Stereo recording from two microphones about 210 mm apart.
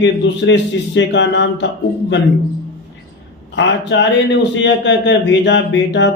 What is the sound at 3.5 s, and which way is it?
A man's voice, 60° left (ahead or behind).